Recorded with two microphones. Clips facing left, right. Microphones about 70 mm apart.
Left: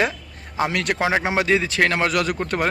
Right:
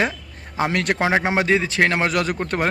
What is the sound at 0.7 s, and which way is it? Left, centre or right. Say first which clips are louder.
A man's voice: right 3 dB; right.